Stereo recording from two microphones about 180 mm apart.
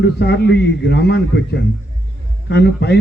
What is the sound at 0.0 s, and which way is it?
A man's voice, 70° left (ahead or behind).